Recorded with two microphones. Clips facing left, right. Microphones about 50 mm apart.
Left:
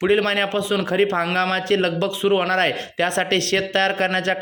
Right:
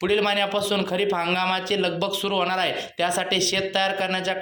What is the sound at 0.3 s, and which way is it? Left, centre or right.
Speech, left.